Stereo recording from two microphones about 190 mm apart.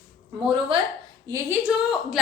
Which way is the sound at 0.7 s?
30° right (ahead or behind).